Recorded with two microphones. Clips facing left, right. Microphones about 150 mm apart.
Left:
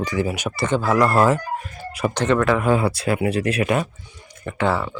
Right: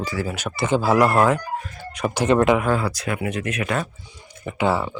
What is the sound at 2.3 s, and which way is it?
Speech, 20° right (ahead or behind).